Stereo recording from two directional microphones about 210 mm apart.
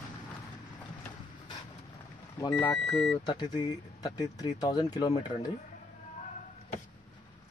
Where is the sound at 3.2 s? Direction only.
20° left (ahead or behind).